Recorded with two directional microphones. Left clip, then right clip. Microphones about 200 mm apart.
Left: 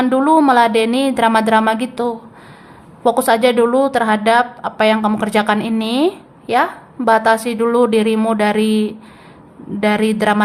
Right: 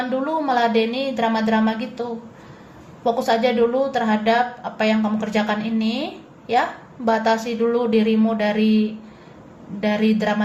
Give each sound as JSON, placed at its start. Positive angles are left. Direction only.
{"t": 0.1, "sound": "a woman's voice", "side_deg": 35}